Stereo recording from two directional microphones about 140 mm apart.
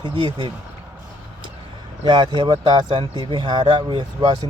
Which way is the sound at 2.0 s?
30° right (ahead or behind).